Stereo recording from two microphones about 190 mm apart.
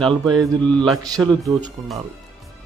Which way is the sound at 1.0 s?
20° right (ahead or behind).